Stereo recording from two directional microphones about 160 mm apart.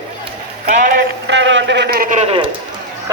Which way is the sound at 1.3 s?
90° right.